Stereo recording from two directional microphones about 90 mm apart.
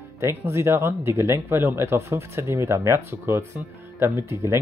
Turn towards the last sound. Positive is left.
turn(degrees=-30)  # may be behind; listen again after turning